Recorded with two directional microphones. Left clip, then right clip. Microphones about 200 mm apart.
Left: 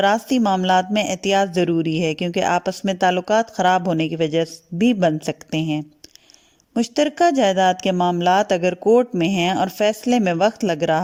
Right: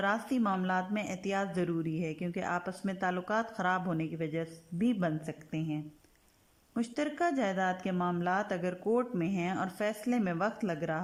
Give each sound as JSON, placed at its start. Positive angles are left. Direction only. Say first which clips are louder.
{"t": 0.0, "sound": "speech", "louder": "left 14 dB", "side_deg": 40}
{"t": 4.0, "sound": "speech", "louder": "left 16 dB", "side_deg": 45}
{"t": 5.2, "sound": "speech", "louder": "left 15 dB", "side_deg": 60}
{"t": 6.7, "sound": "speech", "louder": "left 15 dB", "side_deg": 35}
{"t": 9.2, "sound": "speech", "louder": "left 15 dB", "side_deg": 60}
{"t": 9.5, "sound": "speech", "louder": "left 15 dB", "side_deg": 35}
{"t": 10.6, "sound": "speech", "louder": "left 14 dB", "side_deg": 60}